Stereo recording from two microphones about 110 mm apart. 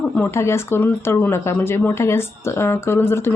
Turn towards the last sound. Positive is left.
turn(degrees=20)  # may be behind; listen again after turning